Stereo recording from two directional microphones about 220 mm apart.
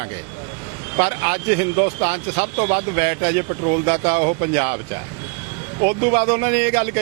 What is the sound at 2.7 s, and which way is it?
A man's voice, 15° right (ahead or behind).